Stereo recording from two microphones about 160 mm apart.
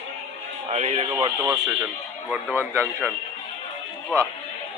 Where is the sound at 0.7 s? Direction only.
45° right (ahead or behind).